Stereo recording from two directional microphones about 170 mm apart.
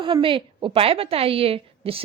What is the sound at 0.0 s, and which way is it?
A woman's voice, 30° right (ahead or behind).